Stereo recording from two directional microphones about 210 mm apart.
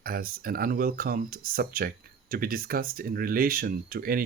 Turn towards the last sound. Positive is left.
turn(degrees=-45)  # may be behind; listen again after turning